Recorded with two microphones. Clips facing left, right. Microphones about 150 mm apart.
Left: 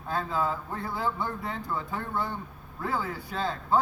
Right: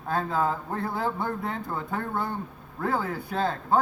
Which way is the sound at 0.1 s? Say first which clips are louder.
Right 3 dB; 50° right (ahead or behind).